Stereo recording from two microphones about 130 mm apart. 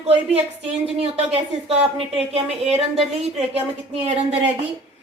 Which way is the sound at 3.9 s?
50° right (ahead or behind).